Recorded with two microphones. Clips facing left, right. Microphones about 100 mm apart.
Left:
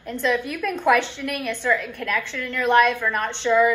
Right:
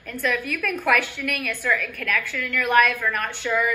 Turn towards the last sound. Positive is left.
turn(degrees=25)  # may be behind; listen again after turning